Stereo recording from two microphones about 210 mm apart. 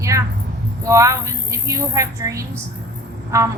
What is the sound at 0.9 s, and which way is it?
A woman's voice, 15° right (ahead or behind).